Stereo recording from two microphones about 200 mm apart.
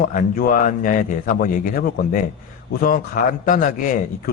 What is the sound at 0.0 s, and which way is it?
Speech, 40° left (ahead or behind).